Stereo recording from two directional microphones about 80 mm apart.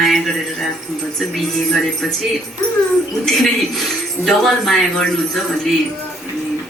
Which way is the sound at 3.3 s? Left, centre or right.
Centre.